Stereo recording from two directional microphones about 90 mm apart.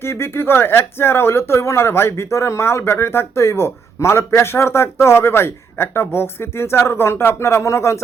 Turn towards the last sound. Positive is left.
turn(degrees=35)  # may be behind; listen again after turning